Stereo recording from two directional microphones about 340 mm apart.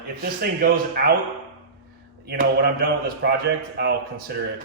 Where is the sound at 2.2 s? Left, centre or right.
Right.